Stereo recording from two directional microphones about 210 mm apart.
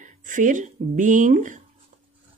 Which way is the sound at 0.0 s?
35° right (ahead or behind).